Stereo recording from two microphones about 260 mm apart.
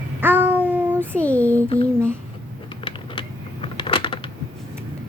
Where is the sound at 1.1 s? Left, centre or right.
Centre.